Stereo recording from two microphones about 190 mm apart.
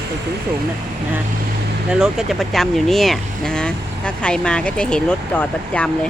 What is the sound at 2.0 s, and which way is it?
Speech, centre (ahead or behind).